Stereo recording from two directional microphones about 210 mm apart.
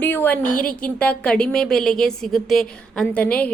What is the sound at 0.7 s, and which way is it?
Speech, 5° left (ahead or behind).